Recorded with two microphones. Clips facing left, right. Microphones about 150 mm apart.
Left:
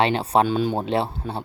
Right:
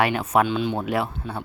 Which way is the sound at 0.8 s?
30° left (ahead or behind).